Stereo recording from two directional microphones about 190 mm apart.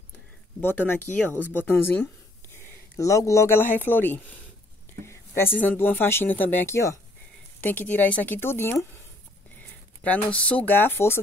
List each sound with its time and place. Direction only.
0.6 s speech: 10° left (ahead or behind)
10.0 s speech: 5° left (ahead or behind)